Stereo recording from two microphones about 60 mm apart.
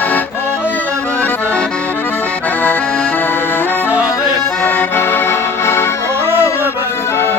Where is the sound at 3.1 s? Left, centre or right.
Left.